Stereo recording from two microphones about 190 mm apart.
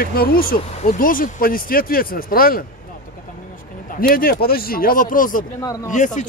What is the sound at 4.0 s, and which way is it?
Speech, 50° left (ahead or behind).